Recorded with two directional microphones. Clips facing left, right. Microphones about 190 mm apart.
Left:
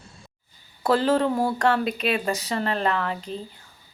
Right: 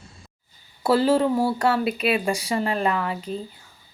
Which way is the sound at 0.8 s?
10° right (ahead or behind).